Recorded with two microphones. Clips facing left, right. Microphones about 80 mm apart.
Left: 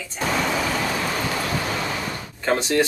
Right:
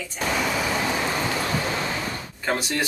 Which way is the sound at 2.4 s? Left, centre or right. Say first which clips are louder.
Left 4 dB; centre.